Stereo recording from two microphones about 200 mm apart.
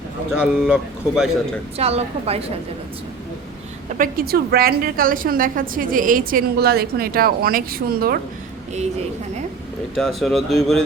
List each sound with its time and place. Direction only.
0.3 s speech: 5° right (ahead or behind)
1.8 s a woman's voice: 30° right (ahead or behind)
3.8 s a woman's voice: 45° right (ahead or behind)
9.9 s speech: centre (ahead or behind)